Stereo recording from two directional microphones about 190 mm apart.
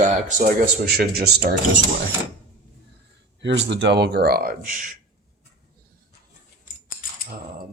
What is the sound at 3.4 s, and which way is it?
Speech, 70° right (ahead or behind).